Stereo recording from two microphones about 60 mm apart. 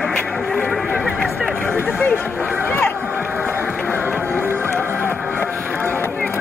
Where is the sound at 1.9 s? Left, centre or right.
Left.